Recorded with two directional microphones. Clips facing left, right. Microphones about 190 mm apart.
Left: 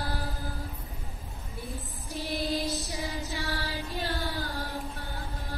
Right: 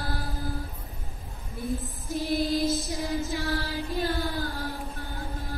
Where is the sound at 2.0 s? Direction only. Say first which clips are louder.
Right 5 dB; 45° right (ahead or behind).